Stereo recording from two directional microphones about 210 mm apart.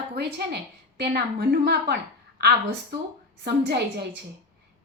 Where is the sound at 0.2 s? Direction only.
50° right (ahead or behind).